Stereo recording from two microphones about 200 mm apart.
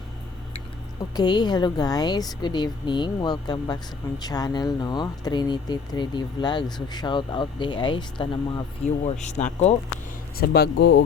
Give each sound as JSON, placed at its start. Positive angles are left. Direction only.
{"t": 1.1, "sound": "speech", "side_deg": 20}
{"t": 9.0, "sound": "speech", "side_deg": 35}
{"t": 10.3, "sound": "speech", "side_deg": 50}